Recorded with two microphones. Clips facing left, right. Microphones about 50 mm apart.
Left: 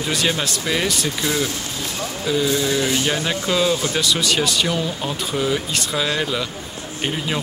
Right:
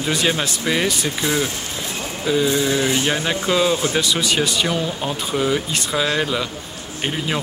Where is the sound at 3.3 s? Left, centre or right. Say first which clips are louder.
Right 2 dB; centre.